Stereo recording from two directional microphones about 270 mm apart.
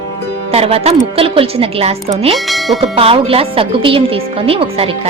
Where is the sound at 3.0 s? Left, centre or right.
Right.